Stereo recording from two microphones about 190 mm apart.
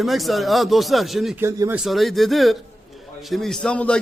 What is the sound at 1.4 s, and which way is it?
Speech, 15° right (ahead or behind).